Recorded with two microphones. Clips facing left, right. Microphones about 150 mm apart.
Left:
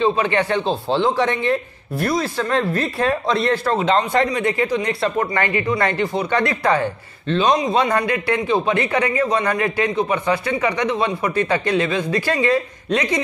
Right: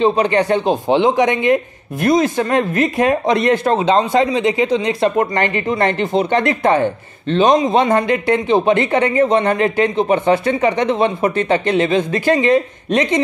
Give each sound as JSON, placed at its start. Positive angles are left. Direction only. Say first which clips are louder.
{"t": 0.2, "sound": "speech", "louder": "right 5 dB", "side_deg": -40}
{"t": 0.6, "sound": "speech", "louder": "right 5 dB", "side_deg": -15}